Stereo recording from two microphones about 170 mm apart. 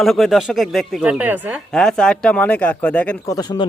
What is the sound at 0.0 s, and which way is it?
A woman's voice, centre (ahead or behind).